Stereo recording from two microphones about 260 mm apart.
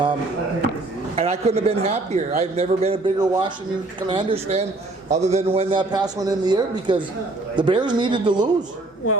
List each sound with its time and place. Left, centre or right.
1.1 s a man's voice: right